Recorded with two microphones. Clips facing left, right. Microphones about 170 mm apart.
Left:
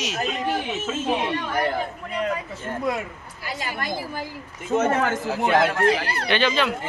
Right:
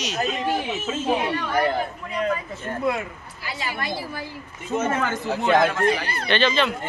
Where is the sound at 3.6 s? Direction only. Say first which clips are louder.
Even; 45° left (ahead or behind).